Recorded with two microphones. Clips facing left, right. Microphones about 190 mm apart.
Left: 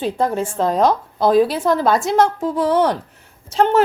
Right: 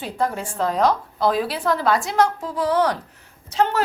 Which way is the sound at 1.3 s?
45° left (ahead or behind).